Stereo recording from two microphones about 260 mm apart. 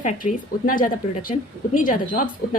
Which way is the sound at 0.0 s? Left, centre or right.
Left.